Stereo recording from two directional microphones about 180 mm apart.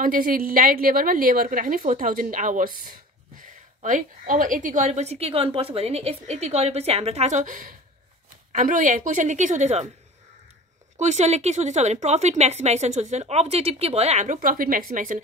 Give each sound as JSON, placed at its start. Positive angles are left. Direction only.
{"t": 0.0, "sound": "a woman's voice", "side_deg": -50}
{"t": 11.0, "sound": "a woman's voice", "side_deg": -40}